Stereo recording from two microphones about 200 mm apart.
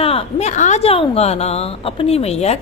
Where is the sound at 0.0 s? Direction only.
30° left (ahead or behind).